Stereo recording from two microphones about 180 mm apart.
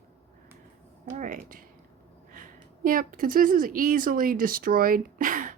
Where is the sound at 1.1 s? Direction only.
45° right (ahead or behind).